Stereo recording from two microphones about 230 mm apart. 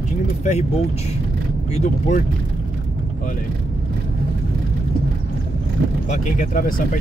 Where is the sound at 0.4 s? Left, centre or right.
Left.